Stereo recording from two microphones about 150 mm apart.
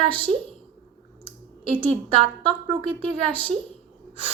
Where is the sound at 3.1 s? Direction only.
5° left (ahead or behind).